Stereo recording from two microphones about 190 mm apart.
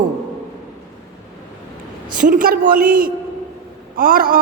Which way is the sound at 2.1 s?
45° right (ahead or behind).